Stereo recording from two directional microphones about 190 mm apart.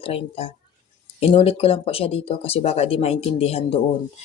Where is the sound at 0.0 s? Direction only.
30° left (ahead or behind).